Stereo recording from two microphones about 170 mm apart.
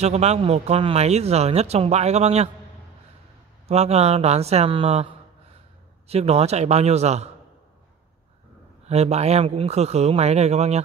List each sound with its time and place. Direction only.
0.0 s speech: 40° right (ahead or behind)
3.6 s speech: 40° right (ahead or behind)
8.8 s speech: 40° right (ahead or behind)